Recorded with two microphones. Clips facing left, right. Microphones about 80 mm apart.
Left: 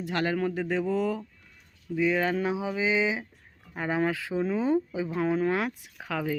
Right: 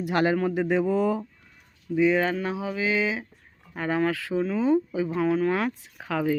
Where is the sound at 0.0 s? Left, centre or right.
Centre.